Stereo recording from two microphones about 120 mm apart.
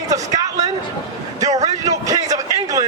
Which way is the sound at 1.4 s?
30° right (ahead or behind).